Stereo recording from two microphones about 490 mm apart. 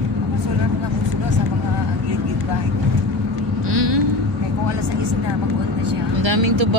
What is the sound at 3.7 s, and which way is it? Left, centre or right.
Vehicle, right.